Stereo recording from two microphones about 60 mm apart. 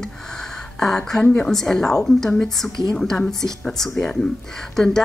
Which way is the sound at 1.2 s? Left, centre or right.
Centre.